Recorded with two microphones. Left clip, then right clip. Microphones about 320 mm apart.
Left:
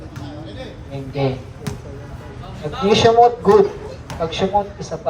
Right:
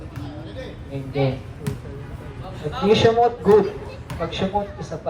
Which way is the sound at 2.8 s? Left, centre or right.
Left.